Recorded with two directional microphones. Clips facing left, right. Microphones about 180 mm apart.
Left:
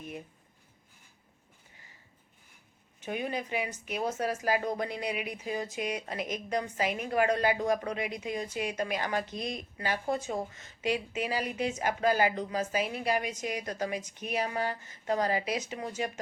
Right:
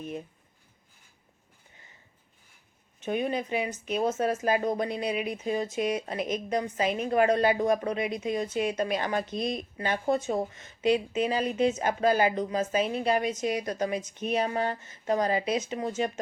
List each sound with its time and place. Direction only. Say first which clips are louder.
3.0 s speech: right 5 dB; 25° right (ahead or behind)